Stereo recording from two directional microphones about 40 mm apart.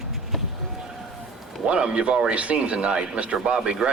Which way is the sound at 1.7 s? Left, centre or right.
Right.